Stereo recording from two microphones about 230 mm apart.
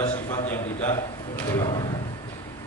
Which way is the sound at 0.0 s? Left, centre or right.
Centre.